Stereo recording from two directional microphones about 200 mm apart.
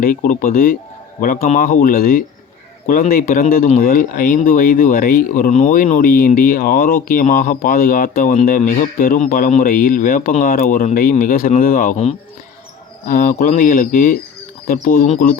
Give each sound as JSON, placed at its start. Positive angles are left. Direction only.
{"t": 0.0, "sound": "a man's voice", "side_deg": 45}